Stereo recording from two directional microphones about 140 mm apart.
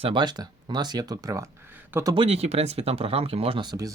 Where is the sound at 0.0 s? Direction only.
35° right (ahead or behind); by 2.0 s 15° right (ahead or behind).